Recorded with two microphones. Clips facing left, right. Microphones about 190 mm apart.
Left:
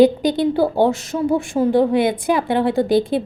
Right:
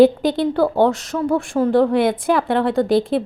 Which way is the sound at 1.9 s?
Centre (ahead or behind).